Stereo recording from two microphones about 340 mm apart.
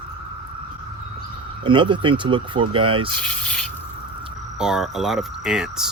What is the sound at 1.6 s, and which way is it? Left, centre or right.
A man's voice, centre.